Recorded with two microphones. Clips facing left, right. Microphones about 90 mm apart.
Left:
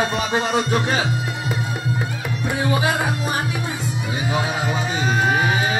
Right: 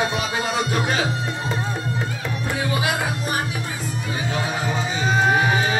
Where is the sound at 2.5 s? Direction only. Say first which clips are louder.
Left 3 dB; 25° left (ahead or behind).